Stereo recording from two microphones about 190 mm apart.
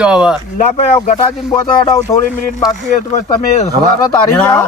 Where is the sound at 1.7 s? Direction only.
25° left (ahead or behind).